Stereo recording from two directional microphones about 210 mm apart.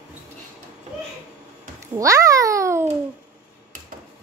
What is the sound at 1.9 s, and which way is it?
Babbling, 15° right (ahead or behind).